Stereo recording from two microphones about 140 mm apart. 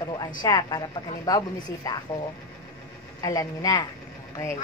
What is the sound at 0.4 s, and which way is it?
A woman's voice, 30° left (ahead or behind).